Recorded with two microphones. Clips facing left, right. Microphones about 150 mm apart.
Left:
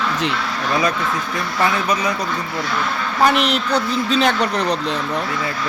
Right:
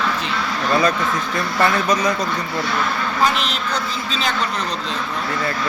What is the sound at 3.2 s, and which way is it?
Speech, 65° left (ahead or behind).